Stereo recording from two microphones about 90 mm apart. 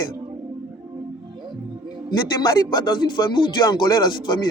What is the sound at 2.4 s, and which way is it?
Speech, 55° left (ahead or behind).